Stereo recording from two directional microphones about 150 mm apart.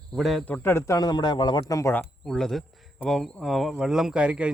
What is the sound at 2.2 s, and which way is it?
Speech, 5° left (ahead or behind).